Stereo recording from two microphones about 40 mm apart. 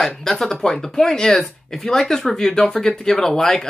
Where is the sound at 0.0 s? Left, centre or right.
Centre.